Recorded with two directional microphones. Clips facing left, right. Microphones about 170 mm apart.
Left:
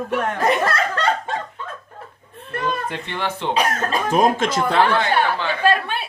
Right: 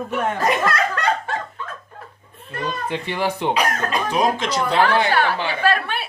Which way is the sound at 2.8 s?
5° right (ahead or behind).